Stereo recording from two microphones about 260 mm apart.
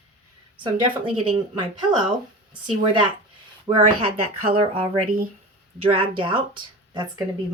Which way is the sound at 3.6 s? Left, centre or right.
Right.